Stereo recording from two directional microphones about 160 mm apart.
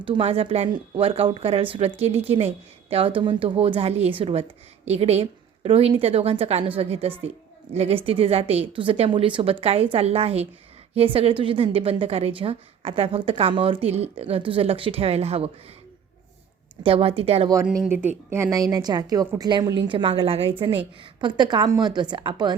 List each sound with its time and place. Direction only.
0.0 s a woman's voice: 35° right (ahead or behind)
16.8 s a woman's voice: 35° right (ahead or behind)
18.5 s a woman's voice: 25° right (ahead or behind)